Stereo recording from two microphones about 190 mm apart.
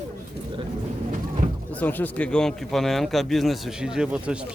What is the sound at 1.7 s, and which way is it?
Speech, 10° left (ahead or behind).